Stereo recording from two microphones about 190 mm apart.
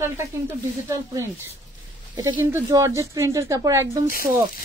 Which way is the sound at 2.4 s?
10° right (ahead or behind).